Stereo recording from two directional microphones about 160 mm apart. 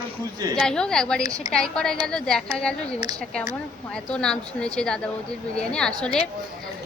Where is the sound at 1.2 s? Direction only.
25° right (ahead or behind).